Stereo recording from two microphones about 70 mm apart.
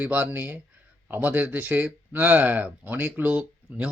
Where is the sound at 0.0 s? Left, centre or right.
Right.